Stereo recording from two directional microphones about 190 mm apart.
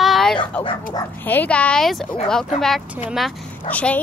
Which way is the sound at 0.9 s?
10° left (ahead or behind).